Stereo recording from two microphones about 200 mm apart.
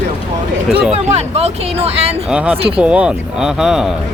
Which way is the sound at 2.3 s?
5° right (ahead or behind).